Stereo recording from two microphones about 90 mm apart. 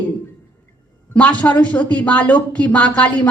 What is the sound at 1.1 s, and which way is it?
Speech, 15° left (ahead or behind).